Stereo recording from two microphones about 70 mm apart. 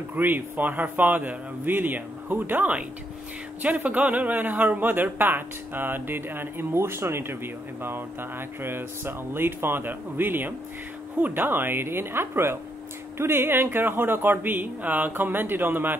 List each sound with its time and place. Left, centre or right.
0.1 s a man's voice: right